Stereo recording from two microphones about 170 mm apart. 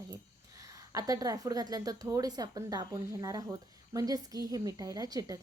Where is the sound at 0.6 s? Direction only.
20° right (ahead or behind).